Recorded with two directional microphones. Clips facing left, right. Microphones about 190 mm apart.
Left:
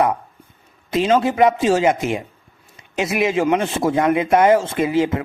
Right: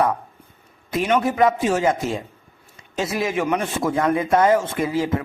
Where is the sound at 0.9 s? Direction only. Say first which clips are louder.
Left 3 dB; 25° left (ahead or behind).